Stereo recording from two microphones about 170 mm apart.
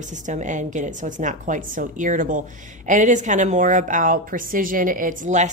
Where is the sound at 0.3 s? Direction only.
45° right (ahead or behind).